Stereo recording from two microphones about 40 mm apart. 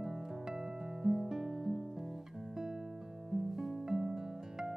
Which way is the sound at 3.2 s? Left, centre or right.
Centre.